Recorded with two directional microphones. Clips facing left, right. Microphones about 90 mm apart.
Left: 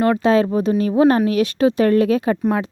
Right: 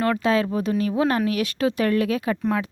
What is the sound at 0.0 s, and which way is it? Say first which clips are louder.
Speech: left 5 dB; 25° left (ahead or behind).